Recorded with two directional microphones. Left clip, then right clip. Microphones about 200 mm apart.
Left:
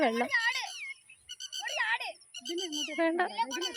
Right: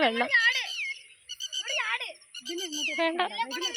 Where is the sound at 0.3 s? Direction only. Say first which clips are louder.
Right 6 dB; 65° left (ahead or behind).